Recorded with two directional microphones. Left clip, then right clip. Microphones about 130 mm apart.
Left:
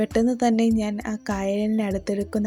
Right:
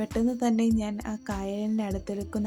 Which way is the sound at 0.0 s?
30° left (ahead or behind).